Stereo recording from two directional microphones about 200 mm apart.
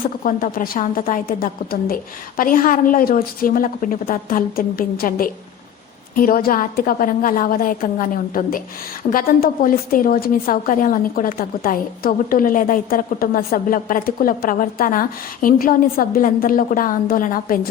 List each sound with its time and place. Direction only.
0.3 s a woman's voice: 45° left (ahead or behind)